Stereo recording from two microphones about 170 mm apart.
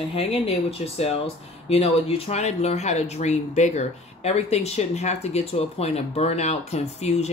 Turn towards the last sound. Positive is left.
turn(degrees=40)  # may be behind; listen again after turning